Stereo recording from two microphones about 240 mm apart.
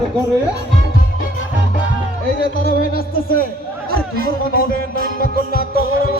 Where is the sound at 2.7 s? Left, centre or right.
Left.